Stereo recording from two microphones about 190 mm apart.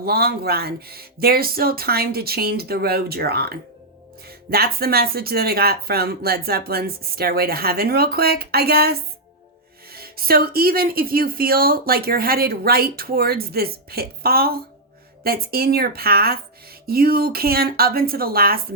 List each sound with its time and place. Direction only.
0.0 s speech: 55° right (ahead or behind)